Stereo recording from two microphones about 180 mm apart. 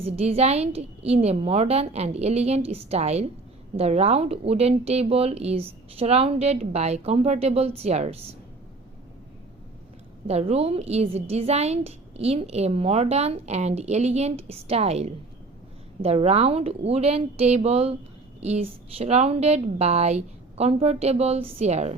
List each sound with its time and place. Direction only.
0.0 s a woman's voice: 35° right (ahead or behind)
10.2 s a woman's voice: 35° right (ahead or behind)